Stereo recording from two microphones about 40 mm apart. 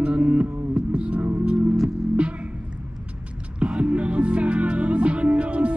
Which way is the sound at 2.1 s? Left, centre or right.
Right.